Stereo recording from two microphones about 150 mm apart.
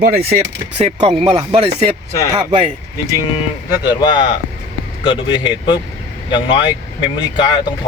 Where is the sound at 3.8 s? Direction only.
30° left (ahead or behind).